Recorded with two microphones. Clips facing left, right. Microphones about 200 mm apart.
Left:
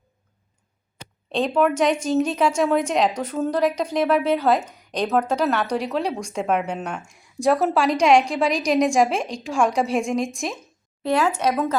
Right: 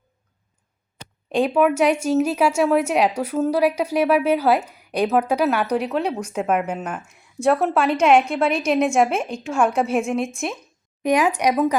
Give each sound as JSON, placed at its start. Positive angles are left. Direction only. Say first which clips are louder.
{"t": 1.3, "sound": "a woman's voice", "louder": "right 2 dB", "side_deg": -10}
{"t": 11.0, "sound": "a woman's voice", "louder": "right 2 dB", "side_deg": -15}